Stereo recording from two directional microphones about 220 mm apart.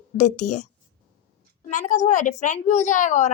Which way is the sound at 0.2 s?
35° left (ahead or behind).